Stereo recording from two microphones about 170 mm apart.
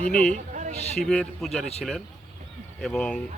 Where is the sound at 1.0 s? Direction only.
5° left (ahead or behind).